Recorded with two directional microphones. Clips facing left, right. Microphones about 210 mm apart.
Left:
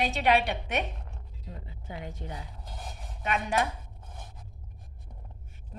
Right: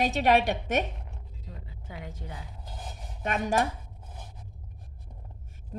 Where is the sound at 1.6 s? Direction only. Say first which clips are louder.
Left 2 dB; 25° left (ahead or behind).